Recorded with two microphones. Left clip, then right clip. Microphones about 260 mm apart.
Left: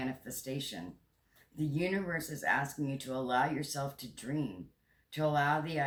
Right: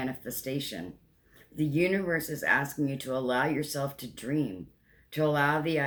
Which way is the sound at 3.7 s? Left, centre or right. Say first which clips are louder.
Right 5 dB; centre.